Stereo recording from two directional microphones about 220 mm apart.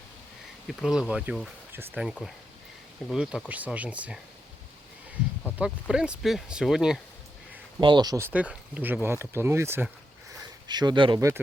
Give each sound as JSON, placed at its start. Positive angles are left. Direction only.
{"t": 0.7, "sound": "speech", "side_deg": 0}
{"t": 5.5, "sound": "speech", "side_deg": -5}
{"t": 7.8, "sound": "speech", "side_deg": -20}